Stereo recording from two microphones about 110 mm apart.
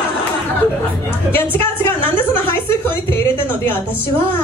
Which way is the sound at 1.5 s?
20° left (ahead or behind).